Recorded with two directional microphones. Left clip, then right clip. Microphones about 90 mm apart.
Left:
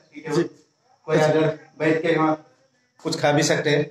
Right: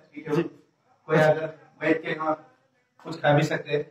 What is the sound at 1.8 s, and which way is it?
Speech, 40° left (ahead or behind).